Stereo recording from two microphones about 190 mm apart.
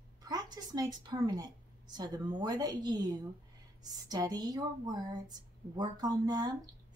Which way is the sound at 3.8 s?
20° right (ahead or behind).